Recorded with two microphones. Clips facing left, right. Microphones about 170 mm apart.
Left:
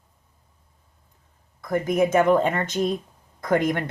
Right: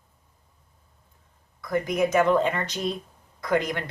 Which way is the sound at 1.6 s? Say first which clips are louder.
Left 3 dB; 50° left (ahead or behind).